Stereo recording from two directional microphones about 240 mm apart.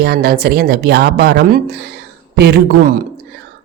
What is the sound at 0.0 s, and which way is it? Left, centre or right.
A woman's voice, right.